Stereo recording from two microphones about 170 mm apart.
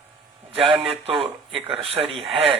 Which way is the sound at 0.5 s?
35° right (ahead or behind).